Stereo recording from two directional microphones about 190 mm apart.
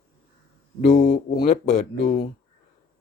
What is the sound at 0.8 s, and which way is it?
Speech, 40° left (ahead or behind).